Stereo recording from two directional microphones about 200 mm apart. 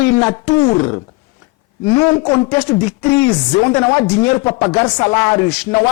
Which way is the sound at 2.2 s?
15° left (ahead or behind).